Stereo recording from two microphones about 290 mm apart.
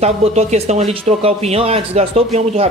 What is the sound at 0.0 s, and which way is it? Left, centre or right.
Speech, right.